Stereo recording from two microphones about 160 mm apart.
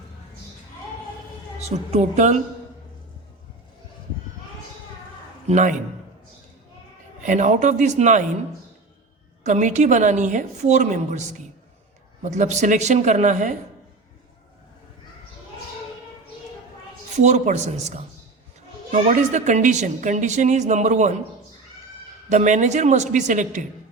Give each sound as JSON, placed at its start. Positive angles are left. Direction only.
{"t": 1.5, "sound": "a woman's voice", "side_deg": -45}
{"t": 5.5, "sound": "a man's voice", "side_deg": -50}
{"t": 7.2, "sound": "a woman's voice", "side_deg": -50}
{"t": 9.4, "sound": "a woman's voice", "side_deg": -50}
{"t": 17.2, "sound": "a woman's voice", "side_deg": -45}
{"t": 22.3, "sound": "a woman's voice", "side_deg": -50}